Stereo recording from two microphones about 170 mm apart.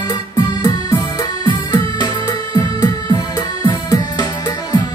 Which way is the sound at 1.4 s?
25° left (ahead or behind).